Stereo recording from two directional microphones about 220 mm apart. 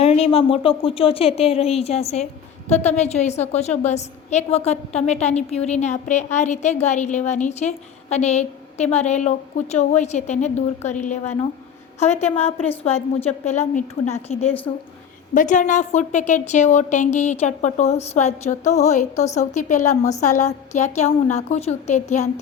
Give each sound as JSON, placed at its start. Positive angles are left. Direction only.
{"t": 0.0, "sound": "a woman's voice", "side_deg": 30}
{"t": 14.7, "sound": "speech", "side_deg": 15}
{"t": 15.4, "sound": "a woman's voice", "side_deg": 35}